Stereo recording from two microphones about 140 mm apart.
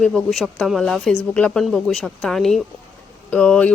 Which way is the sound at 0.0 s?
Centre (ahead or behind).